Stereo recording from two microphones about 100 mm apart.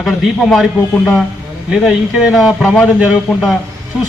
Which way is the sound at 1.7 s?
5° right (ahead or behind).